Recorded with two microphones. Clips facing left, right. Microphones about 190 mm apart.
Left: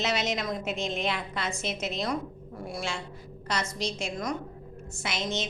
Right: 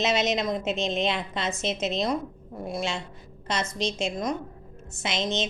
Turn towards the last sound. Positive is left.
turn(degrees=-20)  # may be behind; listen again after turning